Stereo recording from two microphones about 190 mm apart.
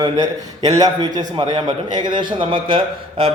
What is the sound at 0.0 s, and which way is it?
A man's voice, 20° right (ahead or behind).